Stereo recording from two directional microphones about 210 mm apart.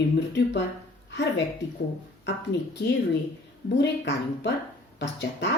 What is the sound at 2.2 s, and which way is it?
Speech, 55° left (ahead or behind).